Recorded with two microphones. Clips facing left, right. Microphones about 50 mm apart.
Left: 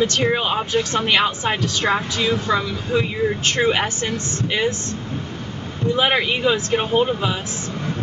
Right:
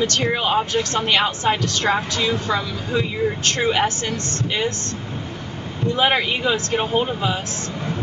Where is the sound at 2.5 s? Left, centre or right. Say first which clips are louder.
Left 2 dB; centre.